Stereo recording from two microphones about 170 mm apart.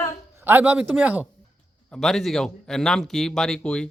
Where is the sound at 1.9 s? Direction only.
Centre (ahead or behind).